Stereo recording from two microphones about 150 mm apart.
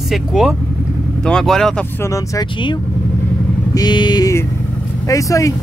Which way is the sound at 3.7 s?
30° left (ahead or behind).